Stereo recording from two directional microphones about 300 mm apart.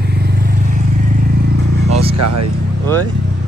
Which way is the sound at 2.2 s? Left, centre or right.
Right.